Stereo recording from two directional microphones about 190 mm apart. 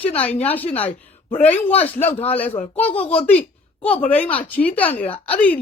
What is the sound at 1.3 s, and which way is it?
Speech, 40° left (ahead or behind).